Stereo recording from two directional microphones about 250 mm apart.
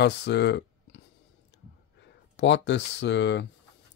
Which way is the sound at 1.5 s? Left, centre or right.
Left.